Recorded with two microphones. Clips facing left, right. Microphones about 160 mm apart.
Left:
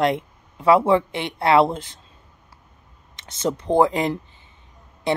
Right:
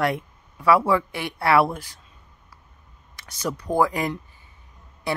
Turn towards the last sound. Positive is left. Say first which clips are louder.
# left 5 dB
turn(degrees=20)  # may be behind; listen again after turning